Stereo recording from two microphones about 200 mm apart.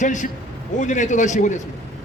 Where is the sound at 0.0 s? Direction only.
40° left (ahead or behind).